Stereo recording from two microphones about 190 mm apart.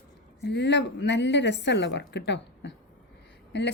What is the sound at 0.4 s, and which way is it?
A woman's voice, 65° left (ahead or behind).